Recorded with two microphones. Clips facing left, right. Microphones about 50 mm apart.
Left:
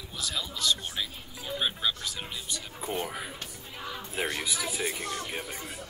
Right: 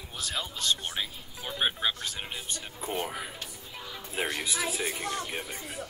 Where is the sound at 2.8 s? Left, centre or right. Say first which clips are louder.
Even; centre.